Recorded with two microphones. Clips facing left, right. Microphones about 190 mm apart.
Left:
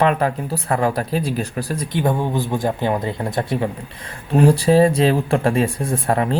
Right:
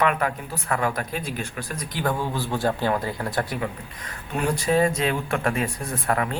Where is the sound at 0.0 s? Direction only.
30° left (ahead or behind).